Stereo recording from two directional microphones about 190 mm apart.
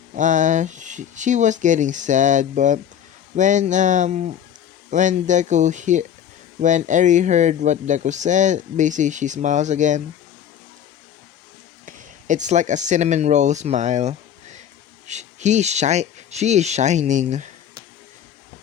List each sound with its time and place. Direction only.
0.1 s speech: 40° right (ahead or behind)
11.9 s speech: 40° right (ahead or behind)